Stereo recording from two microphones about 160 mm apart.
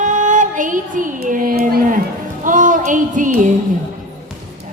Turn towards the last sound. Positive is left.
turn(degrees=-55)  # may be behind; listen again after turning